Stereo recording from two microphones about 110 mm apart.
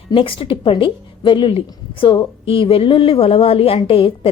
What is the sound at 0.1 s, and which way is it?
A woman's voice, 55° left (ahead or behind).